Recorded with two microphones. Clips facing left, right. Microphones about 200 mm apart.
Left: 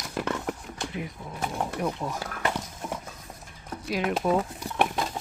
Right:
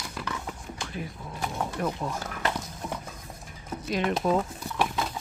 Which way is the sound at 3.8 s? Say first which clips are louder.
Even; 5° left (ahead or behind).